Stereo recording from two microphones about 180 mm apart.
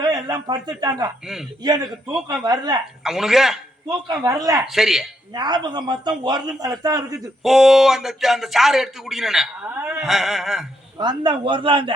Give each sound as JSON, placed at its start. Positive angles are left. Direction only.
{"t": 0.0, "sound": "a man's voice", "side_deg": -20}
{"t": 1.2, "sound": "a man's voice", "side_deg": 0}
{"t": 1.6, "sound": "speech", "side_deg": -20}
{"t": 3.0, "sound": "a man's voice", "side_deg": 0}
{"t": 4.2, "sound": "speech", "side_deg": -20}
{"t": 4.6, "sound": "a man's voice", "side_deg": 0}
{"t": 5.3, "sound": "speech", "side_deg": -25}
{"t": 7.4, "sound": "a man's voice", "side_deg": 0}
{"t": 10.9, "sound": "speech", "side_deg": -25}